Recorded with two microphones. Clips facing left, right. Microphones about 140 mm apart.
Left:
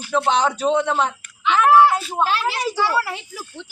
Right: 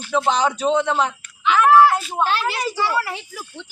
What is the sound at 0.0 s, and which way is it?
Speech, 5° left (ahead or behind).